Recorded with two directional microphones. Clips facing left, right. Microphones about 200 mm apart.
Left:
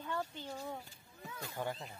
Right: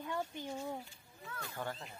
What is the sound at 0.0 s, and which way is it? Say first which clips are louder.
Speech: right 1 dB; 15° right (ahead or behind).